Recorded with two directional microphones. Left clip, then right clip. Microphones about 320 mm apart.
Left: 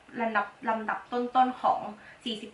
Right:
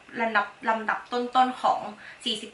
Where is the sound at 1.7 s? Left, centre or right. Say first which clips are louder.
Right 2 dB; centre.